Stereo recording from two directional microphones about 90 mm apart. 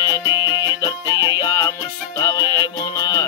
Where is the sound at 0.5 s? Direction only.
40° left (ahead or behind).